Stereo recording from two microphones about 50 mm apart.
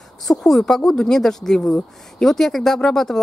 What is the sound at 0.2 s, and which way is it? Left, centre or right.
A woman's voice, centre.